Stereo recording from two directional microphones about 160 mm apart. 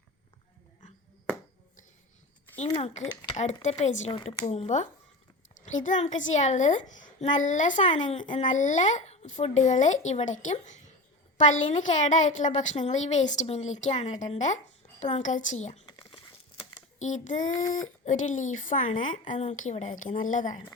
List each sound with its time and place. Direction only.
2.7 s a child's voice: 40° left (ahead or behind)
4.1 s a child's voice: 35° left (ahead or behind)
15.9 s crumpling: 30° left (ahead or behind)
17.0 s a child's voice: 50° left (ahead or behind)